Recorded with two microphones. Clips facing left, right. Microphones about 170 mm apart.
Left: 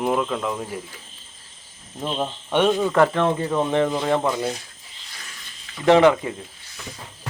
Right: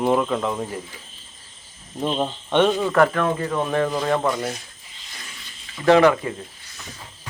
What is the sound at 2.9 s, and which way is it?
Speech, 20° left (ahead or behind).